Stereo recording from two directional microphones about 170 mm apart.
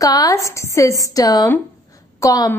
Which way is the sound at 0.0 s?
20° left (ahead or behind).